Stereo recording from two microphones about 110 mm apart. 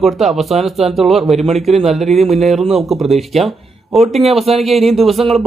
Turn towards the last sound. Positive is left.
turn(degrees=0)  # may be behind; listen again after turning